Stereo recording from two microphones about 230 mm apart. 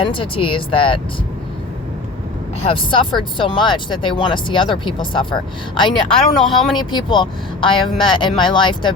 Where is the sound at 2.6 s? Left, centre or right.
Left.